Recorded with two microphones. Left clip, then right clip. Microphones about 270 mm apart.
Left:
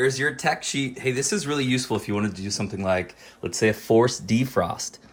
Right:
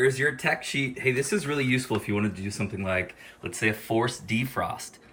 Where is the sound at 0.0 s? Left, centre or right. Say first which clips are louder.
Left 1 dB; centre.